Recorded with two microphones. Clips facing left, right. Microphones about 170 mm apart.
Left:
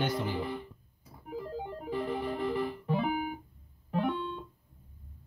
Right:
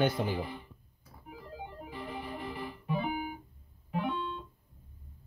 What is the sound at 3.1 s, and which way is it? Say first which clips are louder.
Music: left 3 dB; 40° left (ahead or behind).